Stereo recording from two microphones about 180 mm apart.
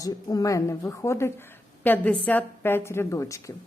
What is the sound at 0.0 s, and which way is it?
A woman's voice, 20° left (ahead or behind).